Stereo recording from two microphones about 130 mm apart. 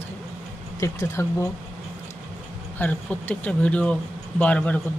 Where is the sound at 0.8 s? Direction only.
25° left (ahead or behind).